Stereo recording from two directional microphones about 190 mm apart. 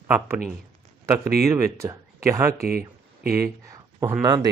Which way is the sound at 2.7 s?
50° right (ahead or behind).